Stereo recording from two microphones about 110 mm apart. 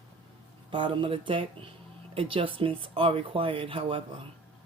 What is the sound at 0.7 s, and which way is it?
Speech, 50° right (ahead or behind).